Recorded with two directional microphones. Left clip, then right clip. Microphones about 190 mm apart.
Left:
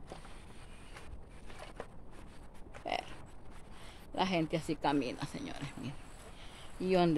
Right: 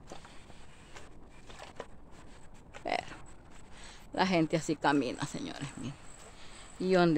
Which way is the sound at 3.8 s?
35° right (ahead or behind).